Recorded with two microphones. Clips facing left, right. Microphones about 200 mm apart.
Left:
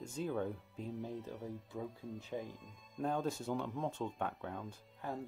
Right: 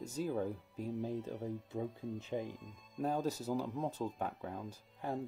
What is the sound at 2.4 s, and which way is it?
Speech, centre (ahead or behind).